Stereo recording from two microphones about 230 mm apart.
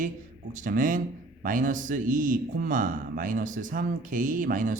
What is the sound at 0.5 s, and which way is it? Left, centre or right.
A man's voice, right.